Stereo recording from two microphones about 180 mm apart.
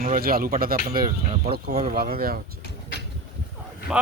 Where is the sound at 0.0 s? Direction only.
50° right (ahead or behind).